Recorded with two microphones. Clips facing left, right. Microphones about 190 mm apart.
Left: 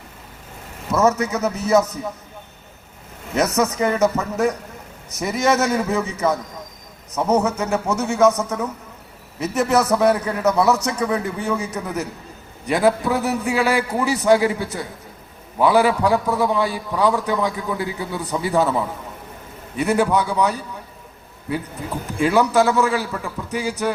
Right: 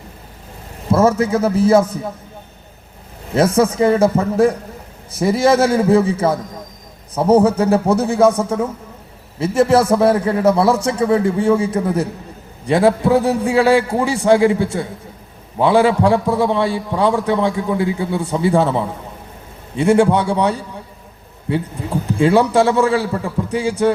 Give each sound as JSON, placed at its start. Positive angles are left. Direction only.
{"t": 0.9, "sound": "a man's voice", "side_deg": -30}
{"t": 3.3, "sound": "a man's voice", "side_deg": -30}